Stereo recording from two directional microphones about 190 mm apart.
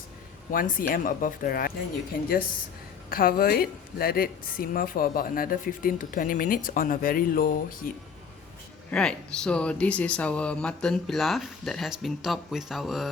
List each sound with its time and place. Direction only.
0.5 s a woman's voice: 45° left (ahead or behind)
3.1 s a woman's voice: 50° left (ahead or behind)
8.9 s speech: 5° left (ahead or behind)